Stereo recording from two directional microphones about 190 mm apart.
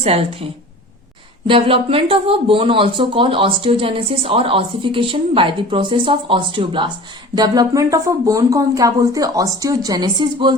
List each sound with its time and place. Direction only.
0.0 s a woman's voice: 30° right (ahead or behind)
1.5 s speech: 30° right (ahead or behind)